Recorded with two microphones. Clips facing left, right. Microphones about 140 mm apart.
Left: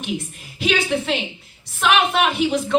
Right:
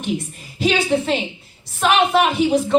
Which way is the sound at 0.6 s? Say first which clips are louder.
Right 3 dB; 35° right (ahead or behind).